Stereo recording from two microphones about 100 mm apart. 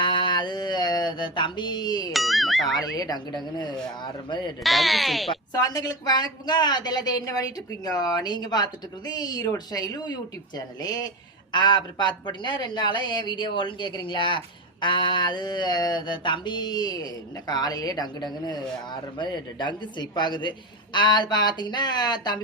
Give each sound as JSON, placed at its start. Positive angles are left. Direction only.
{"t": 0.0, "sound": "mantra", "side_deg": 55}
{"t": 2.1, "sound": "speech", "side_deg": 0}
{"t": 2.9, "sound": "speech", "side_deg": 40}
{"t": 4.6, "sound": "speech", "side_deg": 0}
{"t": 5.5, "sound": "a woman's voice", "side_deg": 40}